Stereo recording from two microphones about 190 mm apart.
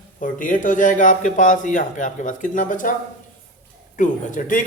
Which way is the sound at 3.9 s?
40° left (ahead or behind).